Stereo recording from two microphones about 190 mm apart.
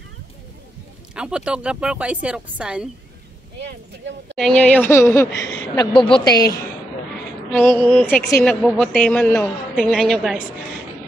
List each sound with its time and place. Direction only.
1.1 s a woman's voice: 5° right (ahead or behind)
4.4 s speech: 5° left (ahead or behind)
5.8 s a woman's voice: 25° left (ahead or behind); by 10.4 s centre (ahead or behind)